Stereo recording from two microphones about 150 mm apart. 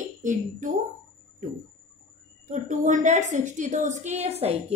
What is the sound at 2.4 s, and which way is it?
A woman's voice, 55° right (ahead or behind).